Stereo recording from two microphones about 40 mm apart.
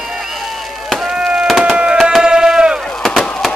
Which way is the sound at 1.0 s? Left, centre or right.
Right.